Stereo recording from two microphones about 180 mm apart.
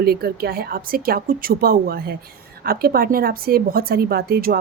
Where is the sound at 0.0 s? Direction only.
60° right (ahead or behind).